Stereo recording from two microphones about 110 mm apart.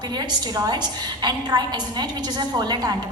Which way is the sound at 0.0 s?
40° right (ahead or behind).